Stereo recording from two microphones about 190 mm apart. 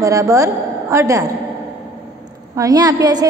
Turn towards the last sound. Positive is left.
turn(degrees=-20)  # may be behind; listen again after turning